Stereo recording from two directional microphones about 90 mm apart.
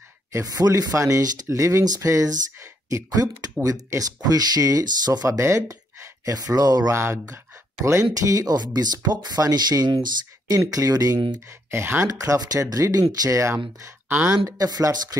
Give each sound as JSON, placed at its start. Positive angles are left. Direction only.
{"t": 0.3, "sound": "speech", "side_deg": -40}
{"t": 6.9, "sound": "speech", "side_deg": -30}
{"t": 11.7, "sound": "speech", "side_deg": -25}
{"t": 12.2, "sound": "speech", "side_deg": -40}
{"t": 14.1, "sound": "speech", "side_deg": -15}
{"t": 14.4, "sound": "speech", "side_deg": -40}